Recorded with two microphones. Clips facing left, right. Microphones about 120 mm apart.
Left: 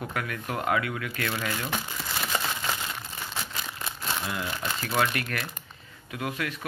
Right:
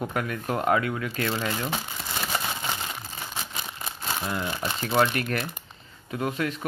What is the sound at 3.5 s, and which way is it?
Crumpling, 20° right (ahead or behind).